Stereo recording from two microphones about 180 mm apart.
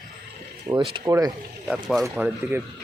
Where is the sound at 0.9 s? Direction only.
20° right (ahead or behind).